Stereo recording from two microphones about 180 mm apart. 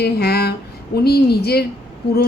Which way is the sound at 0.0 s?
65° left (ahead or behind).